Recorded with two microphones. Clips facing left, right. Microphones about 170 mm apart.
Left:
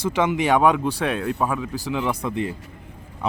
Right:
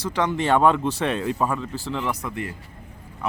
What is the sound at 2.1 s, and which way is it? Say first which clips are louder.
Speech: left 4 dB; 25° left (ahead or behind).